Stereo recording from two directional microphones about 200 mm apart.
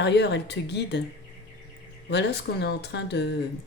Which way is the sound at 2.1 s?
60° left (ahead or behind).